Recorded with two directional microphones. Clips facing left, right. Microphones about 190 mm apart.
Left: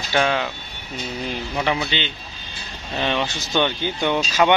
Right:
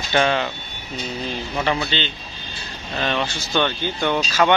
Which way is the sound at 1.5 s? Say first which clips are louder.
Right 1 dB; 10° left (ahead or behind).